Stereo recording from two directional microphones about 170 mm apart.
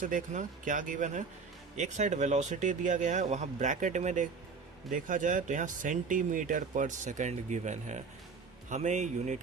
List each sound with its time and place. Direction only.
0.0 s speech: 50° right (ahead or behind)